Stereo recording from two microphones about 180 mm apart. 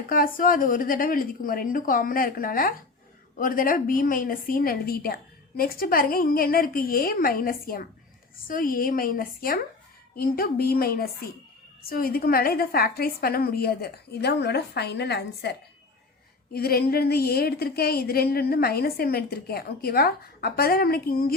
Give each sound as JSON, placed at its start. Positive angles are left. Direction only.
{"t": 0.1, "sound": "a woman's voice", "side_deg": 50}